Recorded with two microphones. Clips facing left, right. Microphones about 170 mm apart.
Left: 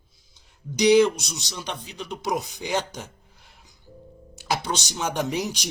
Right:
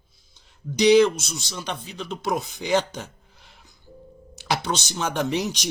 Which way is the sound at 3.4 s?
5° left (ahead or behind).